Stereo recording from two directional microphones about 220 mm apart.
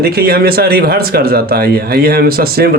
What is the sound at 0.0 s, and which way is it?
Speech, 45° right (ahead or behind).